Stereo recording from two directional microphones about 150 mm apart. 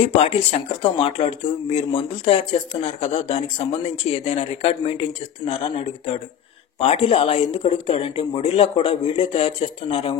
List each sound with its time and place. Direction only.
0.0 s speech: 40° left (ahead or behind)